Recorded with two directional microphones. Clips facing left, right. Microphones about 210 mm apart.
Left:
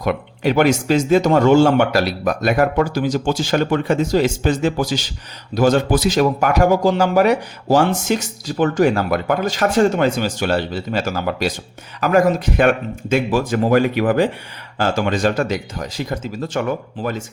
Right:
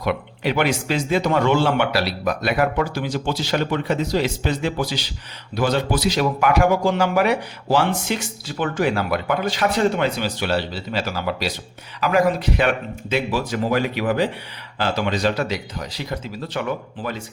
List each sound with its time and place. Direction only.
0.0 s speech: 45° left (ahead or behind)